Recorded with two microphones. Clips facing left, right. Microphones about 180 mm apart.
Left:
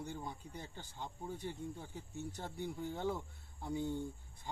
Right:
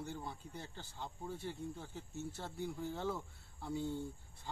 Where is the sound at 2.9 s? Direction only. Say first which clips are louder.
Left 1 dB; 15° left (ahead or behind).